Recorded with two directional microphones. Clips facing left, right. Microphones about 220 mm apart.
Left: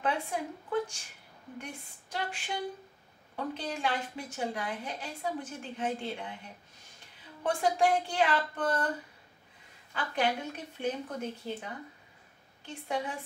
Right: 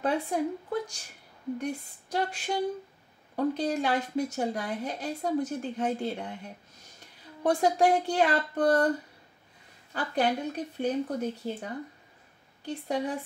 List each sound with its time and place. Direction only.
0.0 s speech: 40° right (ahead or behind)
9.9 s speech: 35° right (ahead or behind)